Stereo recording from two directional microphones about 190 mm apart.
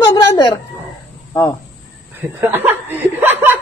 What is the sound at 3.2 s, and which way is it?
Chuckle, 10° right (ahead or behind).